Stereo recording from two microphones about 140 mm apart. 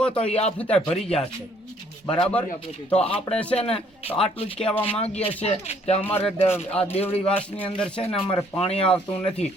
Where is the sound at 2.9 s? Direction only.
45° left (ahead or behind).